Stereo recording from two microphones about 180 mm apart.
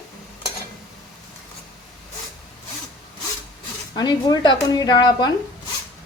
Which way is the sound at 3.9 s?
20° left (ahead or behind).